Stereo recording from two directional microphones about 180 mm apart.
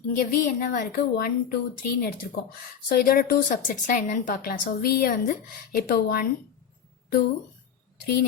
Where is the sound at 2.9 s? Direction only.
55° left (ahead or behind).